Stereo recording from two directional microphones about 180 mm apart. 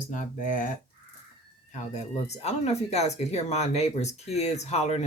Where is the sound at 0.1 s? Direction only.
45° left (ahead or behind).